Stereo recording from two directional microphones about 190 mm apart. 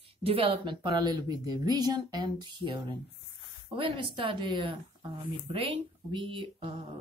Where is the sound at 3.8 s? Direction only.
25° right (ahead or behind).